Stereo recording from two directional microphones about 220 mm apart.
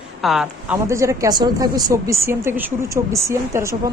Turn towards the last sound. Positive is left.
turn(degrees=-15)  # may be behind; listen again after turning